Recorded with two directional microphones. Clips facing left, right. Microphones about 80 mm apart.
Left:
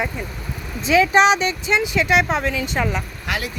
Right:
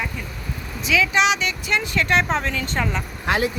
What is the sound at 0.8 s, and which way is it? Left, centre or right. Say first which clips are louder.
Speech: left 5 dB; left.